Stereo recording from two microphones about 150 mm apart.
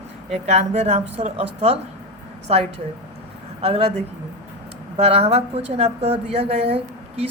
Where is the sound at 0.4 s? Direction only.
50° right (ahead or behind).